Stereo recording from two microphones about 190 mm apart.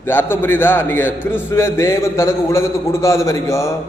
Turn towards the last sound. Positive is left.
turn(degrees=15)  # may be behind; listen again after turning